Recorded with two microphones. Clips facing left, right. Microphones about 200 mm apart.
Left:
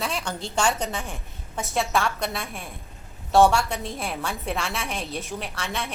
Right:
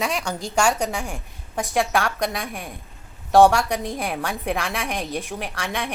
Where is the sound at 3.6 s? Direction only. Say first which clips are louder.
Right 4 dB; 15° right (ahead or behind).